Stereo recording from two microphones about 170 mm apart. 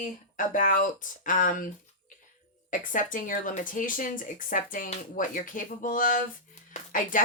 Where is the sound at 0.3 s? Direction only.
50° left (ahead or behind).